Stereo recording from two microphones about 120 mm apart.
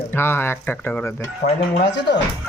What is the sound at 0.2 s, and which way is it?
Speech, 20° left (ahead or behind).